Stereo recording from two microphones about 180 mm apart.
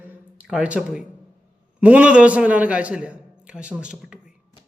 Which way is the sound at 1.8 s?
5° right (ahead or behind).